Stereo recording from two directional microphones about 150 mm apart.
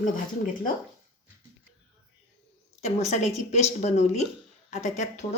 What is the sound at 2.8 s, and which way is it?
A woman's voice, 50° left (ahead or behind).